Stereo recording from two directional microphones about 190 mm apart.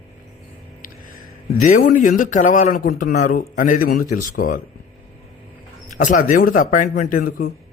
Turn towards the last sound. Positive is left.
turn(degrees=50)  # may be behind; listen again after turning